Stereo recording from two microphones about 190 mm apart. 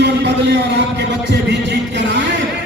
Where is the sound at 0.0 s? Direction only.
65° right (ahead or behind).